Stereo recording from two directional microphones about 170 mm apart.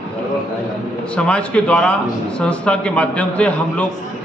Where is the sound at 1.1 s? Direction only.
5° left (ahead or behind).